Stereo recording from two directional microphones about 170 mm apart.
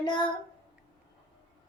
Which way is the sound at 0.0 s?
25° left (ahead or behind).